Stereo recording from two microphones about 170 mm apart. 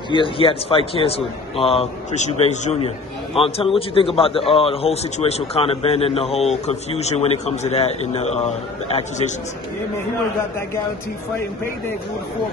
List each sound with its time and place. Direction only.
0.1 s a man's voice: 30° left (ahead or behind)